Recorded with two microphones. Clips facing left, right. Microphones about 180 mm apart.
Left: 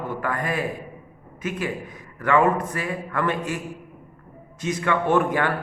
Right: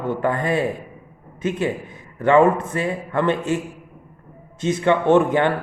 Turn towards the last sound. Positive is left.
turn(degrees=-25)  # may be behind; listen again after turning